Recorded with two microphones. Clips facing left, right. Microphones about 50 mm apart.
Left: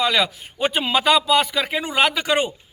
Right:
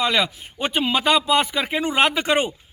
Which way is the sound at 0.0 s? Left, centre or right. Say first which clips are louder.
Left 1 dB; centre.